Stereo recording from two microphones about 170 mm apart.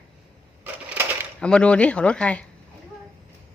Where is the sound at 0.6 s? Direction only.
10° right (ahead or behind).